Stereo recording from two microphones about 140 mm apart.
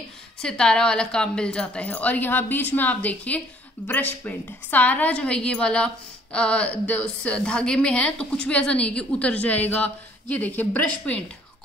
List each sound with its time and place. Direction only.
0.4 s a woman's voice: 5° left (ahead or behind)